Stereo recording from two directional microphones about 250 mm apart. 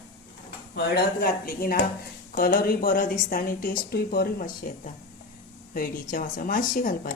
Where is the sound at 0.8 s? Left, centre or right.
Left.